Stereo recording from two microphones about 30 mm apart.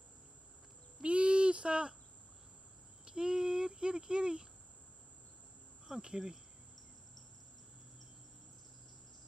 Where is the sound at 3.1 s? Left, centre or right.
Right.